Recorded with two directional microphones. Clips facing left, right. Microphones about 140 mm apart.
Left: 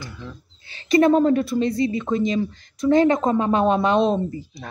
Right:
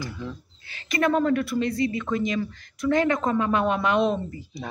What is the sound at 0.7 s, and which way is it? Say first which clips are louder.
A woman's voice: left 8 dB; 30° left (ahead or behind).